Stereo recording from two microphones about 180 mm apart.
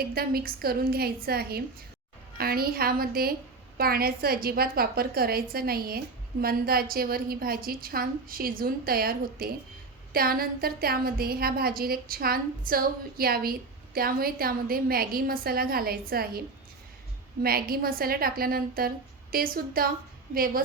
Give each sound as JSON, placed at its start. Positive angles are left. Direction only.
{"t": 0.0, "sound": "a woman's voice", "side_deg": -55}
{"t": 17.4, "sound": "a woman's voice", "side_deg": -55}